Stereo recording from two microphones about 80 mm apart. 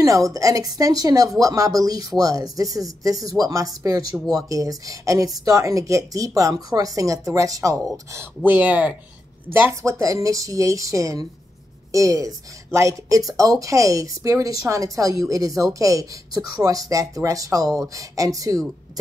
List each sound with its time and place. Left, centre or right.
0.0 s speech: right
8.5 s speech: centre
9.8 s speech: right